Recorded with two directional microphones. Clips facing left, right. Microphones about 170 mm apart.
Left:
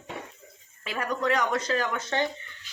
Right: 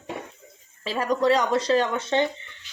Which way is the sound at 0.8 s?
30° right (ahead or behind).